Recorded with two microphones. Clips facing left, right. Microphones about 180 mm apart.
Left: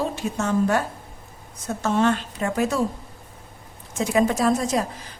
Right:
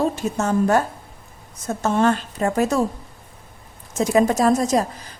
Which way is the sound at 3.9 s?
40° right (ahead or behind).